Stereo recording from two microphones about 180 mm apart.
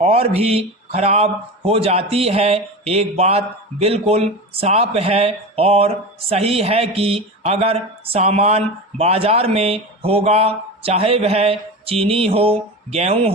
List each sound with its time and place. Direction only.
0.0 s a man's voice: 35° right (ahead or behind)